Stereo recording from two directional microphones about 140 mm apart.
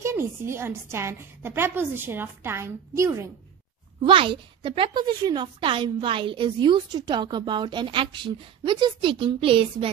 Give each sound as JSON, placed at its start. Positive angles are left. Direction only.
{"t": 0.0, "sound": "a woman's voice", "side_deg": -20}
{"t": 4.0, "sound": "a woman's voice", "side_deg": -40}